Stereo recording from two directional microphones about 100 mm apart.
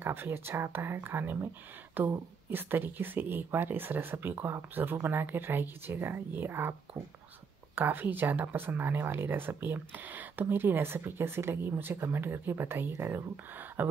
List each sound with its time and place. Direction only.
0.0 s speech: 20° right (ahead or behind)
7.7 s speech: 20° right (ahead or behind)